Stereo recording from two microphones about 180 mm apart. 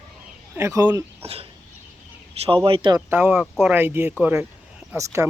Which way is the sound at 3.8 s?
10° right (ahead or behind).